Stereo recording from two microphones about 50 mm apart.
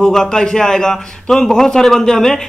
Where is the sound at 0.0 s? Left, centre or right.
Centre.